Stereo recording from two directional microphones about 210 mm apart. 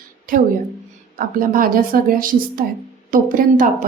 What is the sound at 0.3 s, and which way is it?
Speech, 40° right (ahead or behind).